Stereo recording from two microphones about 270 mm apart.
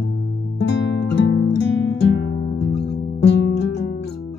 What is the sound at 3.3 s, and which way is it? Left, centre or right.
Music, left.